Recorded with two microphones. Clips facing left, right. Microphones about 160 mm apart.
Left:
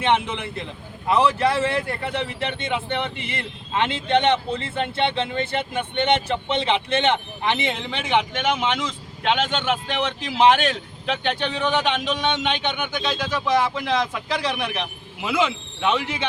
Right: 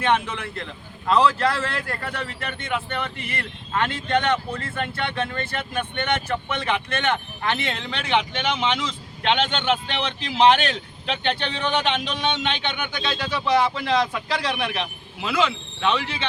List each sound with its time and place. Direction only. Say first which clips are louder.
0.0 s a man's voice: left 1 dB; 20° left (ahead or behind); by 14.8 s centre (ahead or behind)
15.4 s speech: left 1 dB; 20° left (ahead or behind)